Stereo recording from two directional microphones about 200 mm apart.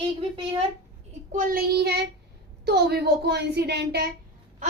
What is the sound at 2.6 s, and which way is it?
Child singing, 55° right (ahead or behind).